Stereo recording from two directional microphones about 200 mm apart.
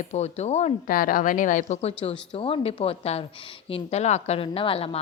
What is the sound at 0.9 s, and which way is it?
A woman's voice, 45° left (ahead or behind).